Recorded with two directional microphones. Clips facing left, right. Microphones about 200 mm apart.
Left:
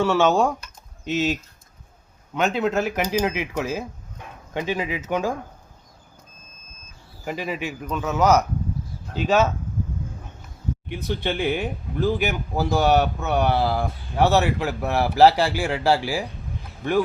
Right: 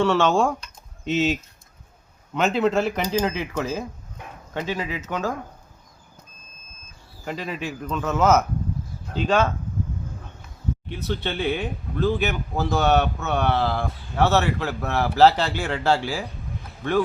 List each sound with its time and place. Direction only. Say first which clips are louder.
0.0 s speech: left 1 dB; 5° left (ahead or behind)
7.3 s speech: left 2 dB; 10° left (ahead or behind)
10.8 s speech: left 3 dB; 15° left (ahead or behind)